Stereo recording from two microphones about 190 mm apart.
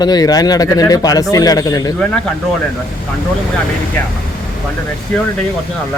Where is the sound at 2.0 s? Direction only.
5° left (ahead or behind).